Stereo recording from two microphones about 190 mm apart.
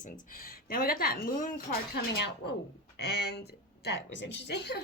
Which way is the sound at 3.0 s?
60° left (ahead or behind).